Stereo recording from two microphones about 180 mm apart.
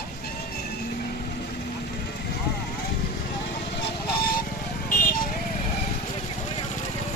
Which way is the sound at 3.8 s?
55° left (ahead or behind).